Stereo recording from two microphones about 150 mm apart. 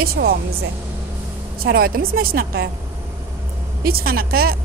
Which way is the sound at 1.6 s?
85° right.